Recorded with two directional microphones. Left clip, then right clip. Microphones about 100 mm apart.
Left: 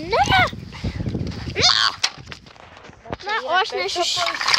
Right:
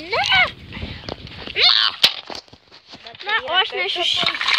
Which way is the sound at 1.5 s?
80° left.